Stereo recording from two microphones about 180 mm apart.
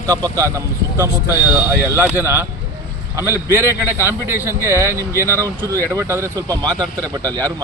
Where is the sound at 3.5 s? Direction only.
15° right (ahead or behind).